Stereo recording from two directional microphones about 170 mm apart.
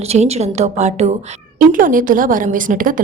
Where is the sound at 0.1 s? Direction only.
40° right (ahead or behind).